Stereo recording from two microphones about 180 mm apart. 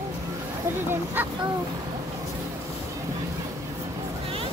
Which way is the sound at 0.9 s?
10° right (ahead or behind).